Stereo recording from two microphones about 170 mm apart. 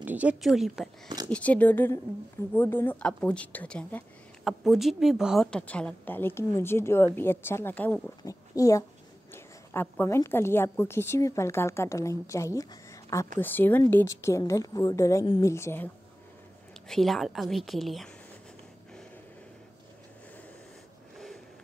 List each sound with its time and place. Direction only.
0.0 s a woman's voice: 10° right (ahead or behind)
1.0 s a sound: 20° right (ahead or behind)
1.3 s a woman's voice: 10° left (ahead or behind)
16.8 s a woman's voice: centre (ahead or behind)